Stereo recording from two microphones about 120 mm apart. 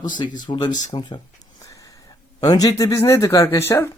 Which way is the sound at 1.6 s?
25° left (ahead or behind).